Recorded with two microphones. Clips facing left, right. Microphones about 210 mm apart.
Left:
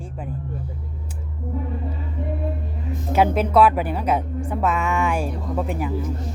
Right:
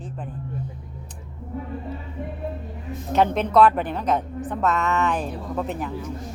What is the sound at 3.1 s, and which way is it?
A woman's voice, 5° left (ahead or behind).